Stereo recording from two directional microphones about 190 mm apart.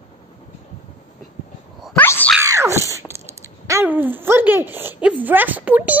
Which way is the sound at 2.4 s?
15° right (ahead or behind).